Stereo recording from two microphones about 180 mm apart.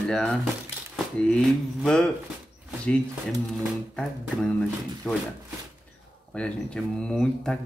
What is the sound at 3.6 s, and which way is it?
Speech, centre (ahead or behind).